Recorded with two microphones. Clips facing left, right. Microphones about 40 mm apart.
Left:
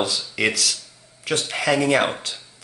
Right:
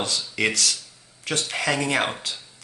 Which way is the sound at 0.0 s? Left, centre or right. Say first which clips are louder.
Left 2 dB; centre.